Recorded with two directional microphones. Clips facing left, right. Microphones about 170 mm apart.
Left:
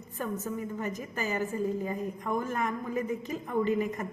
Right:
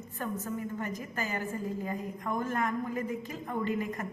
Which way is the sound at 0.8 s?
15° left (ahead or behind).